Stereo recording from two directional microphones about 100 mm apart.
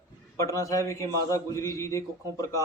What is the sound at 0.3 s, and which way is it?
A man's voice, 35° left (ahead or behind).